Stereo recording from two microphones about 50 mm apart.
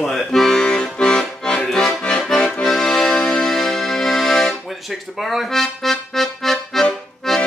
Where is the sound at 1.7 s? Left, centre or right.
Centre.